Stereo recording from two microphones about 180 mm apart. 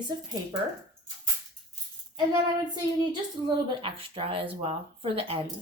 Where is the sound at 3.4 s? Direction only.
30° right (ahead or behind).